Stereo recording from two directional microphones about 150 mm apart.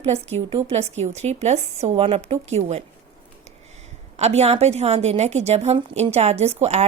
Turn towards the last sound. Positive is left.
turn(degrees=-45)  # may be behind; listen again after turning